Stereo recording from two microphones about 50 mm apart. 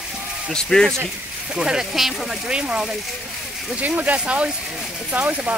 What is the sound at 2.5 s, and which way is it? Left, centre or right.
Speech, centre.